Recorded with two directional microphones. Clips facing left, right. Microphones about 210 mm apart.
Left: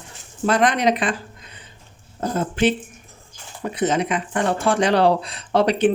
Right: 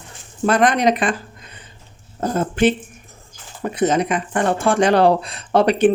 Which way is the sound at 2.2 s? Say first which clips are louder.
Right 3 dB; 50° right (ahead or behind).